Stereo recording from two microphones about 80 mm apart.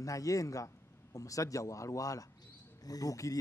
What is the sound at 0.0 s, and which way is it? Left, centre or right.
Speech, left.